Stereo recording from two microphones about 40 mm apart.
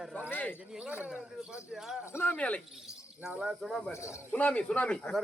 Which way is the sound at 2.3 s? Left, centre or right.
Left.